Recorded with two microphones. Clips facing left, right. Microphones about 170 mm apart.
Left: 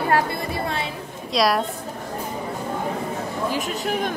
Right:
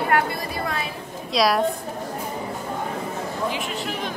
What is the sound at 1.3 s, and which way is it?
Speech, centre (ahead or behind).